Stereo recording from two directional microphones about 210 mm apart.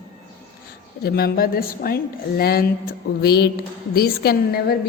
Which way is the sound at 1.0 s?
45° left (ahead or behind).